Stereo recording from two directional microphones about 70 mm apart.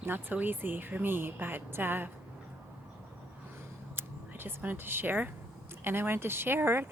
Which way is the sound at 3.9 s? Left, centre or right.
Right.